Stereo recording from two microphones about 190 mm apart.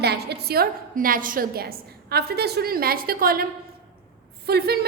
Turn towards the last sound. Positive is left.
turn(degrees=-55)  # may be behind; listen again after turning